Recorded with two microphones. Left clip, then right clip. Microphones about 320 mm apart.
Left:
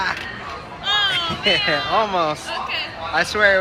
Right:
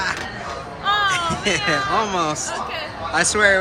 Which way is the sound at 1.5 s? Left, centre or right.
Centre.